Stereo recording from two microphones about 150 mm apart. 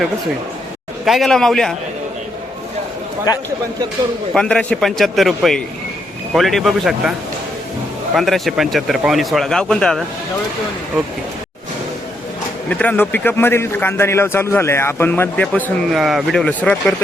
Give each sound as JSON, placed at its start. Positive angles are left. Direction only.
{"t": 1.0, "sound": "speech", "side_deg": 0}
{"t": 3.3, "sound": "speech", "side_deg": 20}
{"t": 4.4, "sound": "speech", "side_deg": 5}
{"t": 12.6, "sound": "a man's voice", "side_deg": 10}
{"t": 15.9, "sound": "speech", "side_deg": 0}